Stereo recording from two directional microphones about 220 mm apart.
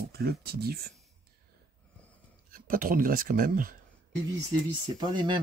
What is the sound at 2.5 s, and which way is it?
Speech, 40° right (ahead or behind).